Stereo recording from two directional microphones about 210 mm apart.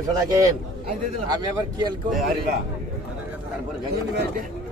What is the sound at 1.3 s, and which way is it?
Speech, 20° right (ahead or behind).